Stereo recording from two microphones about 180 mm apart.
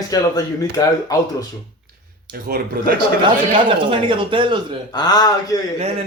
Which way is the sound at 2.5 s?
60° right (ahead or behind).